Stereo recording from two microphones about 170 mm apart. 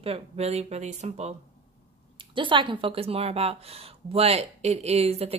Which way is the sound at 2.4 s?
30° right (ahead or behind).